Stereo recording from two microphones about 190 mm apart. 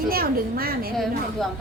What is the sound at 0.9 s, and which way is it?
Speech, centre (ahead or behind).